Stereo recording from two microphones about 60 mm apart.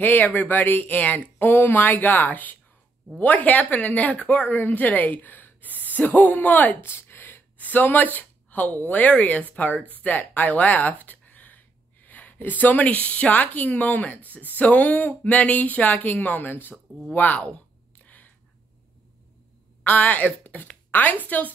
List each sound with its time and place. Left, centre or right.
0.0 s speech: left
6.8 s speech: left
18.0 s a sound: left
19.8 s speech: left